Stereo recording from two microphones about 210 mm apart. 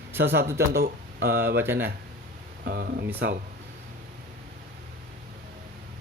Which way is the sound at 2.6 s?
45° right (ahead or behind).